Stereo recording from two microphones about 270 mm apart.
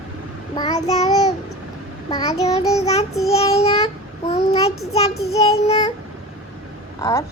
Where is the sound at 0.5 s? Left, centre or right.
Centre.